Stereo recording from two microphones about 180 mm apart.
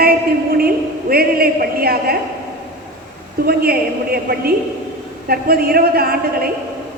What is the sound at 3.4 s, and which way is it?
A man's voice, 60° right (ahead or behind).